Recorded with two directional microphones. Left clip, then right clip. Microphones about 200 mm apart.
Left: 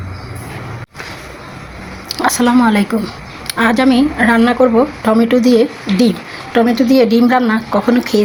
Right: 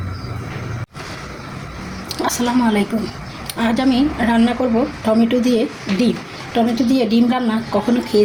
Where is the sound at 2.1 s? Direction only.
20° left (ahead or behind).